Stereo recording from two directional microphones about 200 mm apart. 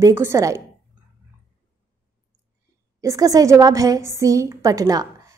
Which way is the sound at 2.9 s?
15° right (ahead or behind).